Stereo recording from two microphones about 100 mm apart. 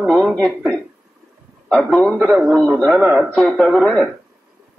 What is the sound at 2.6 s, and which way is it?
Speech, 20° right (ahead or behind).